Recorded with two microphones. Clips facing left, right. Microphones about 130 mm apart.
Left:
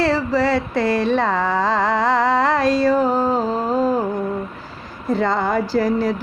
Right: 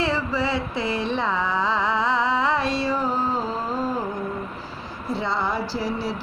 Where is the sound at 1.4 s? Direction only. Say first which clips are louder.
Left 5 dB; 45° left (ahead or behind).